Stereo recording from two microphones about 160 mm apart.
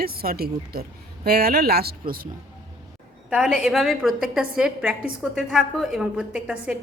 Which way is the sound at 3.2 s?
5° right (ahead or behind).